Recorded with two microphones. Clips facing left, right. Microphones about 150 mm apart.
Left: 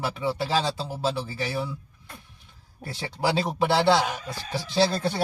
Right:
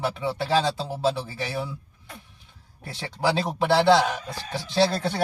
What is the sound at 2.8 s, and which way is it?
A man's voice, 5° left (ahead or behind).